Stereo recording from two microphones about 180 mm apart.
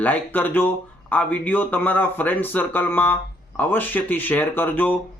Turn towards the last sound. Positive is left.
turn(degrees=10)  # may be behind; listen again after turning